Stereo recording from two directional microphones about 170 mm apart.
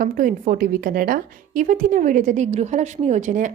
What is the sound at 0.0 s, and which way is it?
A woman's voice, 50° right (ahead or behind).